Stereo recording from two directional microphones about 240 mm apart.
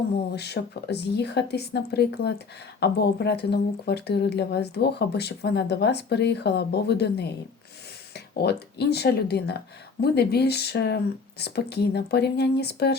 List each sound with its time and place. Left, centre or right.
0.3 s speech: left